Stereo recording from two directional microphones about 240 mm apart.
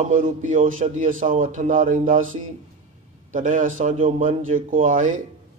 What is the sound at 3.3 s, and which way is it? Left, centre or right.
Speech, right.